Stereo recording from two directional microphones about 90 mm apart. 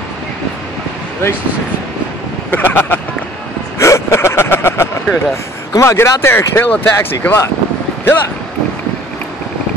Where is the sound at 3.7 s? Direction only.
30° left (ahead or behind).